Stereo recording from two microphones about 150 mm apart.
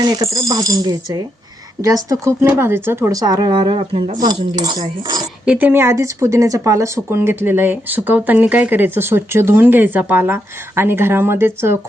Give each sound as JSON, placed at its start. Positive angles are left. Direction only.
{"t": 0.0, "sound": "speech", "side_deg": -25}
{"t": 5.5, "sound": "speech", "side_deg": -10}